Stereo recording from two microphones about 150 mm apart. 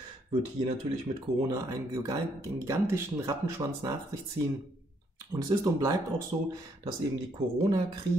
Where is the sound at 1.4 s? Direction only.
25° right (ahead or behind).